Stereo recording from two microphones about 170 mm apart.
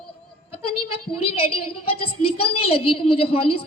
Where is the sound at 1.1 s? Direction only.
35° left (ahead or behind).